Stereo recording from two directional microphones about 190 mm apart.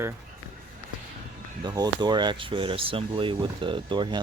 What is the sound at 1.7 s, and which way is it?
Speech, 20° right (ahead or behind).